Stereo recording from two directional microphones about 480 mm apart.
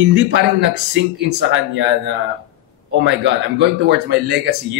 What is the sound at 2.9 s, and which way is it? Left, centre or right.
Speech, right.